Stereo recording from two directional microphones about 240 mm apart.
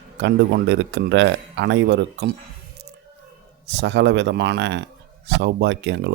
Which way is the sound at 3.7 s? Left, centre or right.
Right.